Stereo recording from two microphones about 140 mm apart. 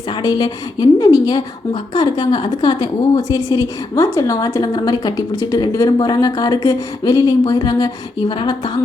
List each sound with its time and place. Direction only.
0.1 s a woman's voice: 30° left (ahead or behind)